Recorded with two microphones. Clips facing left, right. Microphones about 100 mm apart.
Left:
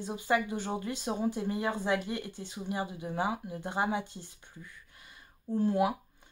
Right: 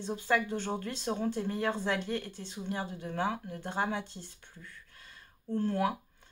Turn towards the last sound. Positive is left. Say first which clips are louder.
# left 2 dB
turn(degrees=15)  # may be behind; listen again after turning